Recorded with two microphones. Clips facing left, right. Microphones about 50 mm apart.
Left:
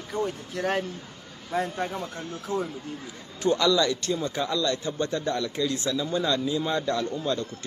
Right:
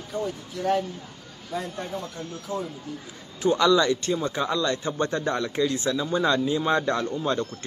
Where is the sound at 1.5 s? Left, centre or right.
Left.